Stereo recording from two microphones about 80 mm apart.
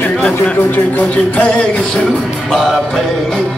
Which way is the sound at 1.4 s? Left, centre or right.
Centre.